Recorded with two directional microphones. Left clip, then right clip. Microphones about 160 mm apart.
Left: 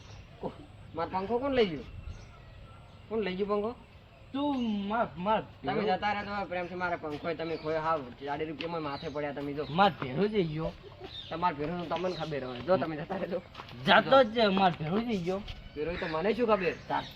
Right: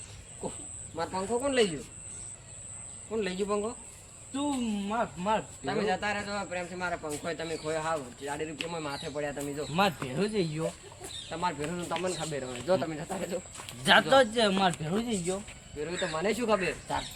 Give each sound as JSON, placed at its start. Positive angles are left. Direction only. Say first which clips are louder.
{"t": 0.9, "sound": "speech", "louder": "even", "side_deg": -10}
{"t": 3.1, "sound": "speech", "louder": "even", "side_deg": -10}
{"t": 11.3, "sound": "speech", "louder": "left 2 dB", "side_deg": 0}
{"t": 15.8, "sound": "speech", "louder": "even", "side_deg": -50}